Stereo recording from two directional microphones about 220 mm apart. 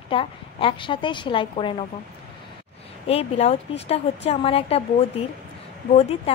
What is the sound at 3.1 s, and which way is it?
A woman's voice, 25° left (ahead or behind).